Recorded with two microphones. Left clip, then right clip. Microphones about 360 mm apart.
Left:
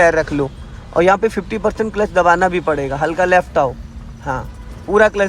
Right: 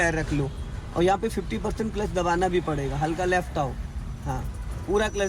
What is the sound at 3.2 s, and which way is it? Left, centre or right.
Speech, left.